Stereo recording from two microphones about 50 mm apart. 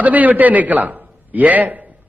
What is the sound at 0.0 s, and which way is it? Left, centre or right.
A man's voice, right.